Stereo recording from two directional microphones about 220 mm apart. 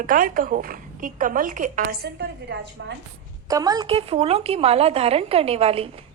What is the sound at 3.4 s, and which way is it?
A woman's voice, 15° right (ahead or behind).